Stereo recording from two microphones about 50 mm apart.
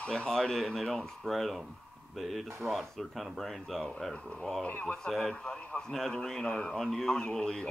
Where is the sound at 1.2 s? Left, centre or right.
Centre.